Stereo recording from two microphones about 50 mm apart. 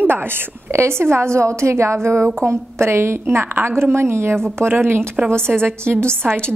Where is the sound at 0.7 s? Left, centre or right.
Right.